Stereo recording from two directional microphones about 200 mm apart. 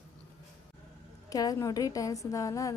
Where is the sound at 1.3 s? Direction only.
20° left (ahead or behind).